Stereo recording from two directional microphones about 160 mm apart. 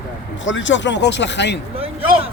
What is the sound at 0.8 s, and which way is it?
Speech, 90° left.